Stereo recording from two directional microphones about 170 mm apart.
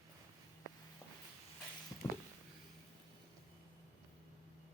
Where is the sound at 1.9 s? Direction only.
25° left (ahead or behind).